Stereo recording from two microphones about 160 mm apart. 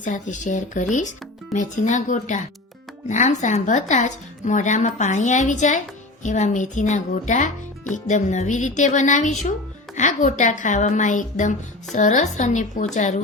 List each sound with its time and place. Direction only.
0.0 s a woman's voice: 50° left (ahead or behind)